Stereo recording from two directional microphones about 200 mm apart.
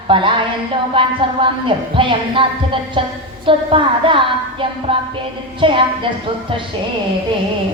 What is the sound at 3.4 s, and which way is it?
Speech, 25° right (ahead or behind).